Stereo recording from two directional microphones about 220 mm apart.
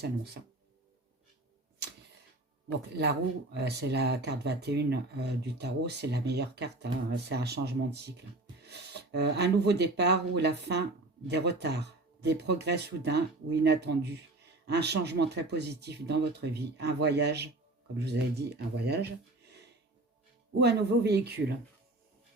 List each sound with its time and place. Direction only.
2.9 s speech: 50° right (ahead or behind)